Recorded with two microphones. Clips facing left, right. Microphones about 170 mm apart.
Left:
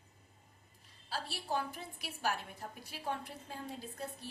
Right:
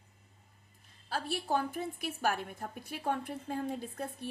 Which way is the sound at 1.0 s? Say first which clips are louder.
Right 6 dB; 55° right (ahead or behind).